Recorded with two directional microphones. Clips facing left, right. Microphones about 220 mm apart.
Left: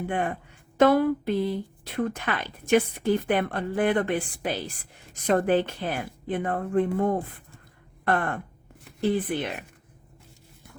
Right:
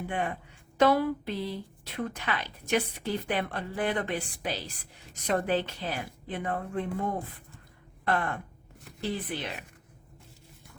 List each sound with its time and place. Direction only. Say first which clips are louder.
0.1 s a woman's voice: left 4 dB; 50° left (ahead or behind)